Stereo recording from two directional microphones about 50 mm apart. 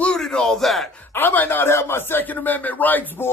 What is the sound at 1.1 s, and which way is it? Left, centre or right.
Speech, left.